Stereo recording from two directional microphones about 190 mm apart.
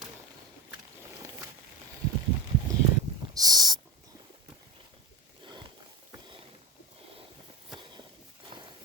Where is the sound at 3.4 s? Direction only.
20° right (ahead or behind).